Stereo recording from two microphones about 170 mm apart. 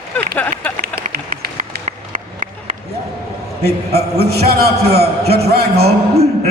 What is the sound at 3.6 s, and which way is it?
A man's voice, 65° right (ahead or behind).